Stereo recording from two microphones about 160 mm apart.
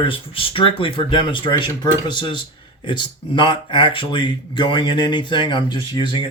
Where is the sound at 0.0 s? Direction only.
35° left (ahead or behind).